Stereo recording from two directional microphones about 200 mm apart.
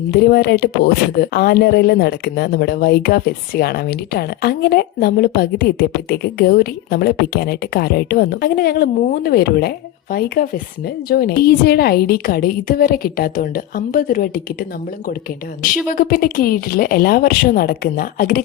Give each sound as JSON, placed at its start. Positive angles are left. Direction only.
{"t": 0.1, "sound": "a woman's voice", "side_deg": 50}
{"t": 15.9, "sound": "a woman's voice", "side_deg": 45}